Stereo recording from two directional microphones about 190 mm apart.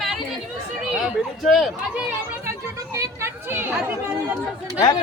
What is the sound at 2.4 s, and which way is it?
Chatter, 15° right (ahead or behind).